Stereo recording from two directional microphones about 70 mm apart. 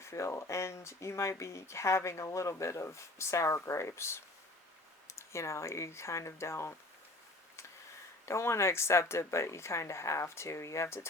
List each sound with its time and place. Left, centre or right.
0.0 s speech: left
8.3 s speech: left